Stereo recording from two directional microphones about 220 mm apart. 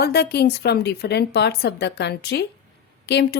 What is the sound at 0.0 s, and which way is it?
Speech, 45° left (ahead or behind).